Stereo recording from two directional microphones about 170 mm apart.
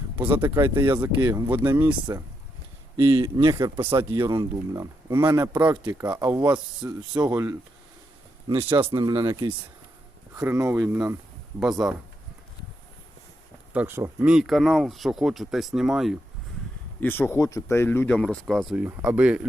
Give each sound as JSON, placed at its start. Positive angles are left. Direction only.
{"t": 0.2, "sound": "speech", "side_deg": -10}
{"t": 3.1, "sound": "speech", "side_deg": -25}
{"t": 8.4, "sound": "speech", "side_deg": -30}
{"t": 10.3, "sound": "speech", "side_deg": -15}
{"t": 13.7, "sound": "speech", "side_deg": -10}
{"t": 14.3, "sound": "speech", "side_deg": 0}
{"t": 17.0, "sound": "speech", "side_deg": 10}
{"t": 18.9, "sound": "speech", "side_deg": -10}